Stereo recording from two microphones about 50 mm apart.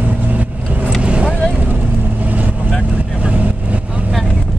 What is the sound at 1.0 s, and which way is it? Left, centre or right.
Boat, right.